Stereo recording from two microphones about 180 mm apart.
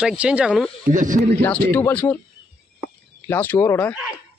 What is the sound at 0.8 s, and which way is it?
Speech, 45° right (ahead or behind).